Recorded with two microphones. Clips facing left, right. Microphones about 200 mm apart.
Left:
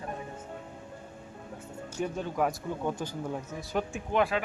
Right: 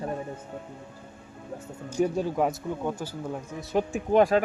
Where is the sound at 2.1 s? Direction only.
30° right (ahead or behind).